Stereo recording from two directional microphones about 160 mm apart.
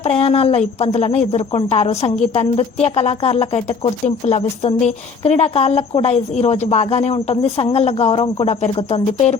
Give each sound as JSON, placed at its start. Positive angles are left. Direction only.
{"t": 0.0, "sound": "a woman's voice", "side_deg": 40}